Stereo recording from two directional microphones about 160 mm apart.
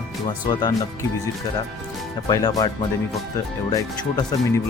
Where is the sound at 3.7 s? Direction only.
20° left (ahead or behind).